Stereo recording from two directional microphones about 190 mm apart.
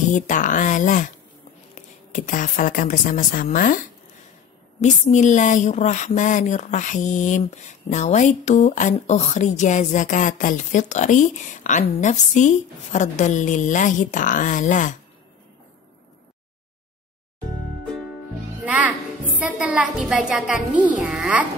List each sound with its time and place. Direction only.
0.1 s a woman's voice: 40° left (ahead or behind)
4.8 s a woman's voice: 40° left (ahead or behind)
18.6 s a child's voice: 5° right (ahead or behind)